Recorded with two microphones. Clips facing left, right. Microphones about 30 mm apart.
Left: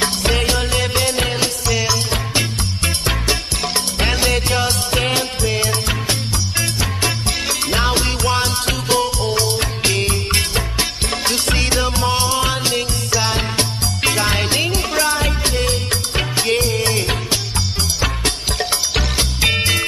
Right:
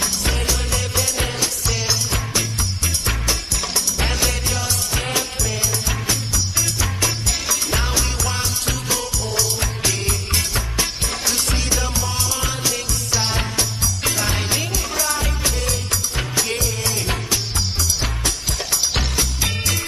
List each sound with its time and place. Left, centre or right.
0.0 s music: left
1.7 s music: centre
2.0 s music: left